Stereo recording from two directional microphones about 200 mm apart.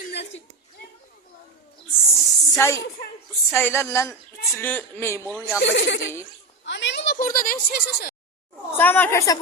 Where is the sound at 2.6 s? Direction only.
15° left (ahead or behind).